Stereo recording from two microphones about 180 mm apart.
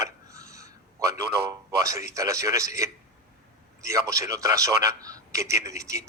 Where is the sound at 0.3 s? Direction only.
20° right (ahead or behind).